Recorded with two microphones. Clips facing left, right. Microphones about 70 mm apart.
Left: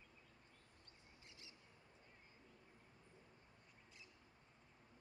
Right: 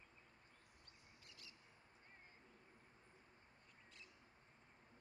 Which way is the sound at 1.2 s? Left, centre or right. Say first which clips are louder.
Even; left.